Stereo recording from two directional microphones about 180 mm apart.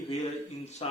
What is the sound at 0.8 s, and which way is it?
Speech, 35° left (ahead or behind).